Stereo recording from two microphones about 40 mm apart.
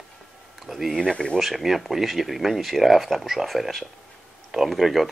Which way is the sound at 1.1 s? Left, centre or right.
Left.